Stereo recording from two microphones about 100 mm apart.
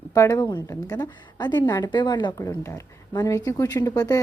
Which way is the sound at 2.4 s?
25° left (ahead or behind).